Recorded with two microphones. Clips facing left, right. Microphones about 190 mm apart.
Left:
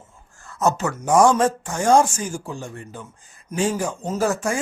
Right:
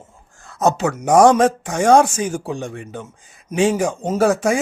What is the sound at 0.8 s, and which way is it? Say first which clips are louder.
Speech: right 5 dB; 75° right (ahead or behind).